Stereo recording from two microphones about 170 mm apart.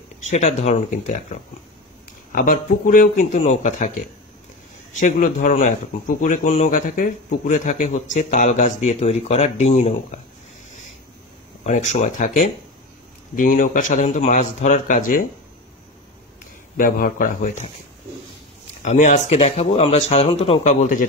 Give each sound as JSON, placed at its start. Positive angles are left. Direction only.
{"t": 0.3, "sound": "speech", "side_deg": 40}
{"t": 5.0, "sound": "speech", "side_deg": 50}
{"t": 11.6, "sound": "speech", "side_deg": 45}
{"t": 13.4, "sound": "speech", "side_deg": 55}
{"t": 16.7, "sound": "speech", "side_deg": 55}
{"t": 18.8, "sound": "speech", "side_deg": 45}